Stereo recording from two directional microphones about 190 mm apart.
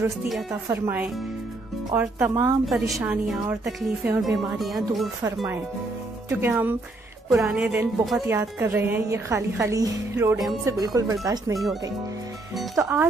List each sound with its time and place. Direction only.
0.7 s a woman's voice: 10° right (ahead or behind)
6.2 s a woman's voice: 10° right (ahead or behind)
12.7 s a woman's voice: 10° right (ahead or behind)